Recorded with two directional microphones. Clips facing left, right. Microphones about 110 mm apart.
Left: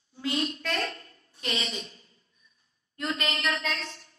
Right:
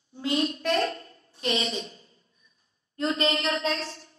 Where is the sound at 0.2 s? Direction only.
25° right (ahead or behind).